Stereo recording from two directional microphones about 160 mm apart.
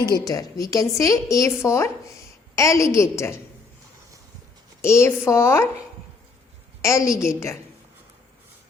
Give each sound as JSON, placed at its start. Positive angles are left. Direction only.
{"t": 0.3, "sound": "a woman's voice", "side_deg": 20}
{"t": 4.8, "sound": "speech", "side_deg": 15}
{"t": 6.8, "sound": "a woman's voice", "side_deg": 20}